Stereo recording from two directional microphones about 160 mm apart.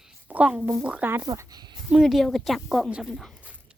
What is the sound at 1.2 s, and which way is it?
Speech, 25° right (ahead or behind).